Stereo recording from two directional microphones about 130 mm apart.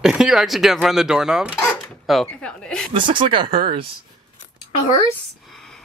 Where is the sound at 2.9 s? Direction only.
40° right (ahead or behind).